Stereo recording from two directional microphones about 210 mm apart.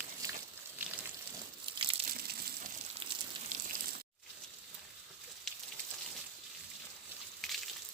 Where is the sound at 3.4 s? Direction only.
40° right (ahead or behind).